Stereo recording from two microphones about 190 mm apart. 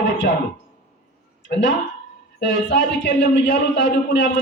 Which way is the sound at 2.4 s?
65° left (ahead or behind).